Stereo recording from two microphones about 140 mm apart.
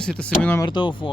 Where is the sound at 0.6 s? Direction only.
35° left (ahead or behind).